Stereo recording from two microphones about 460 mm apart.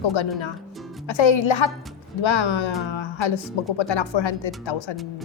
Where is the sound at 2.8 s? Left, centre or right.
Left.